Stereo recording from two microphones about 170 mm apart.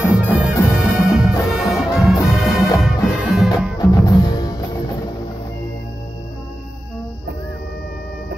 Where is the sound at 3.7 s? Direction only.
25° left (ahead or behind).